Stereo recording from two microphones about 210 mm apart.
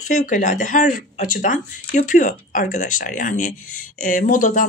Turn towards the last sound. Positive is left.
turn(degrees=40)  # may be behind; listen again after turning